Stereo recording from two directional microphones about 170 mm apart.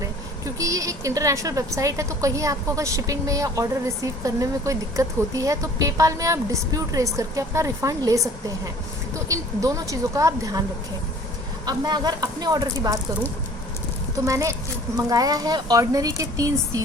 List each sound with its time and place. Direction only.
0.6 s a woman's voice: 20° right (ahead or behind)
11.6 s a woman's voice: 25° right (ahead or behind)
14.3 s a woman's voice: 20° right (ahead or behind)